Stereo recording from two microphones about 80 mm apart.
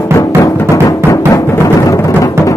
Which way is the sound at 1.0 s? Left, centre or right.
Left.